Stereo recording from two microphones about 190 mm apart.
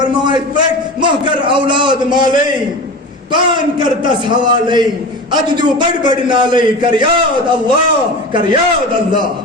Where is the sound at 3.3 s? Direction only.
25° right (ahead or behind).